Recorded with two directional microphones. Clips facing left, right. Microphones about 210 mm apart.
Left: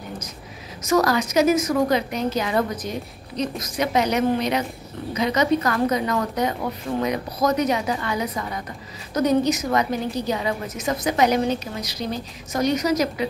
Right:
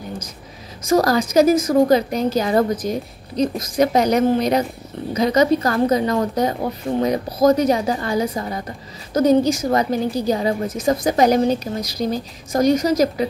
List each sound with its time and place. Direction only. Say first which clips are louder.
0.8 s a woman's voice: right 3 dB; 35° right (ahead or behind)